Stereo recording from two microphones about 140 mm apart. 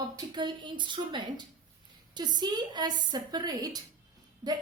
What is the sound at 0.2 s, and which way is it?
A woman's voice, 35° right (ahead or behind).